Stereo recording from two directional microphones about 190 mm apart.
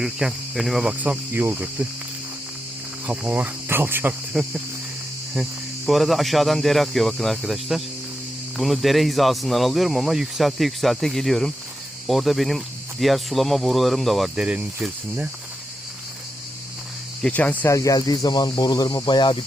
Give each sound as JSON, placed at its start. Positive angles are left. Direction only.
{"t": 0.0, "sound": "speech", "side_deg": 0}
{"t": 3.1, "sound": "cricket", "side_deg": -10}
{"t": 5.3, "sound": "speech", "side_deg": 0}
{"t": 17.2, "sound": "speech", "side_deg": 5}